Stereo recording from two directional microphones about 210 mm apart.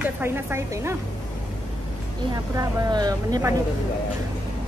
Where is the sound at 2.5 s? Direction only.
20° right (ahead or behind).